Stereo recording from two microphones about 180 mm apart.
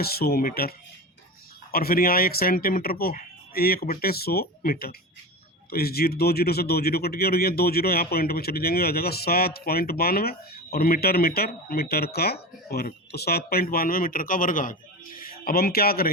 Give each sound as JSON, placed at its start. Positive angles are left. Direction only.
{"t": 0.0, "sound": "speech", "side_deg": 60}
{"t": 1.7, "sound": "speech", "side_deg": 55}